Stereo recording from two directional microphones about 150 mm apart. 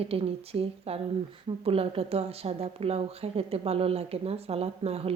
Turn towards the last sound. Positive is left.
turn(degrees=-40)  # may be behind; listen again after turning